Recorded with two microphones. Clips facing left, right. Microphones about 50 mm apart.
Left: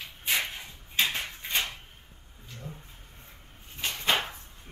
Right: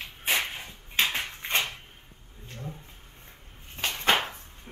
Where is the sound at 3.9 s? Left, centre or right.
Centre.